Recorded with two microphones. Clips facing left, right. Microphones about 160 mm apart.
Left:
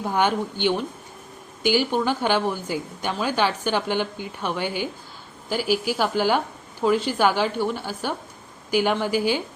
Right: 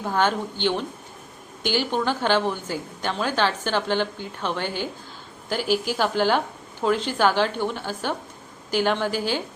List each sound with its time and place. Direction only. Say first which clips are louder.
0.0 s a woman's voice: left 1 dB; 15° left (ahead or behind)
1.6 s a woman's voice: left 2 dB; 10° left (ahead or behind)